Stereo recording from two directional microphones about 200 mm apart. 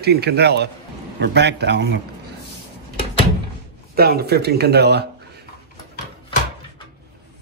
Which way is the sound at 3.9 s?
50° right (ahead or behind).